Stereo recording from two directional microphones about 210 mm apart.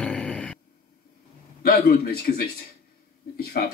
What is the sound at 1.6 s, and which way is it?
A man's voice, 45° left (ahead or behind).